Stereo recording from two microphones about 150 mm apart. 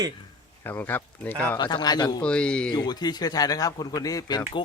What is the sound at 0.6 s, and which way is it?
Speech, 15° left (ahead or behind).